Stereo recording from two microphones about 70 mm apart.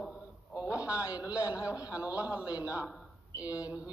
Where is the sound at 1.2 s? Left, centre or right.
Centre.